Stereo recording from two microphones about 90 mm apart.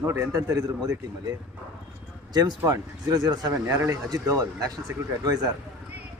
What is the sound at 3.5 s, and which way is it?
Speech, 30° right (ahead or behind).